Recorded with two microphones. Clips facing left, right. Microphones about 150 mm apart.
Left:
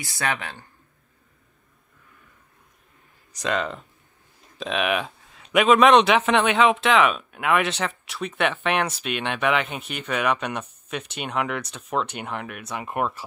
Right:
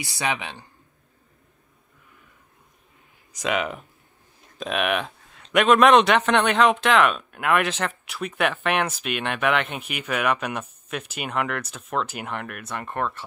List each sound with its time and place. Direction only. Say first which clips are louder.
0.0 s speech: even; 20° right (ahead or behind)
3.3 s speech: even; 5° right (ahead or behind)